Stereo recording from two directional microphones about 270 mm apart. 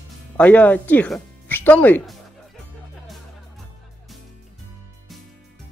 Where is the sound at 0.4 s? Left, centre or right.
Centre.